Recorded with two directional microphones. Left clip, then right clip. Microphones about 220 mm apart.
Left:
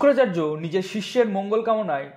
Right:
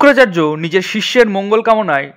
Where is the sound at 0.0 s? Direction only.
35° right (ahead or behind).